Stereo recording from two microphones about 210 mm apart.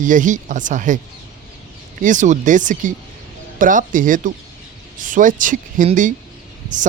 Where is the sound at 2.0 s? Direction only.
35° right (ahead or behind).